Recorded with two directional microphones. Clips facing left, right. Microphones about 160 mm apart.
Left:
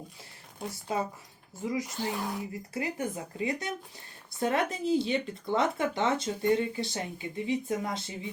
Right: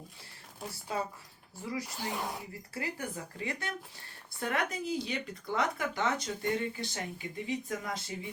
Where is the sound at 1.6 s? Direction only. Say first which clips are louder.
Left 6 dB; 20° left (ahead or behind).